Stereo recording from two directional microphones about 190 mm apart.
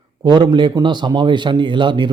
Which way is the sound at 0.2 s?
25° right (ahead or behind).